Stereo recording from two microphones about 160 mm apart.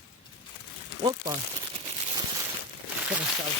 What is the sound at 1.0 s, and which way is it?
Speech, 25° right (ahead or behind).